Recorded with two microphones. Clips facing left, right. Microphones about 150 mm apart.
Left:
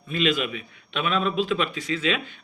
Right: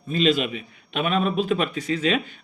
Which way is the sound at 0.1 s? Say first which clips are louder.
Right 3 dB; 40° right (ahead or behind).